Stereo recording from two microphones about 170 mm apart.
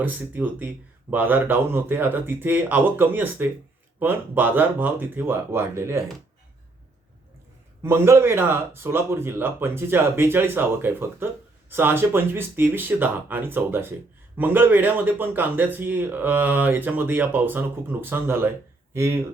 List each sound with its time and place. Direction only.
0.0 s a man's voice: 10° right (ahead or behind)
7.8 s a man's voice: 15° right (ahead or behind)